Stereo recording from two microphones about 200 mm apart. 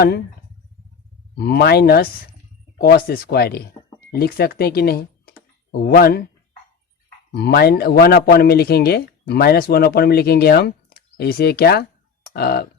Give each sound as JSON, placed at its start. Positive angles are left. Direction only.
{"t": 1.4, "sound": "a man's voice", "side_deg": 50}
{"t": 7.3, "sound": "a man's voice", "side_deg": 50}